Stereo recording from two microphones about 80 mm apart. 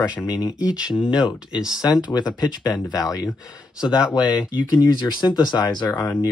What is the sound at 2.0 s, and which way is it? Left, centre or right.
Speech, left.